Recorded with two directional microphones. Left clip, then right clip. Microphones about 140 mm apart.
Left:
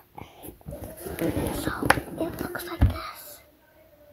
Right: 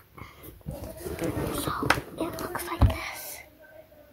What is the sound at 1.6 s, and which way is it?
Whispering, 15° left (ahead or behind).